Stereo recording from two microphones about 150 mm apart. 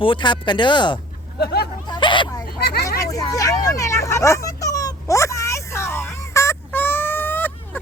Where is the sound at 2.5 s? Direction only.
90° left.